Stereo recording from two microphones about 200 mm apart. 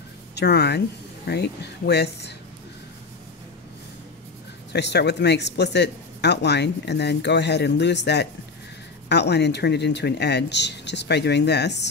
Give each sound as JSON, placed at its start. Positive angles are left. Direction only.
{"t": 0.4, "sound": "speech", "side_deg": 55}
{"t": 4.7, "sound": "speech", "side_deg": 60}